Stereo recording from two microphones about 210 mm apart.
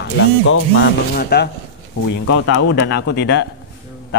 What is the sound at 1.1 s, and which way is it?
Speech, 50° left (ahead or behind).